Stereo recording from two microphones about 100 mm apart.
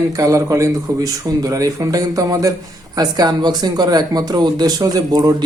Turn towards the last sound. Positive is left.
turn(degrees=-40)  # may be behind; listen again after turning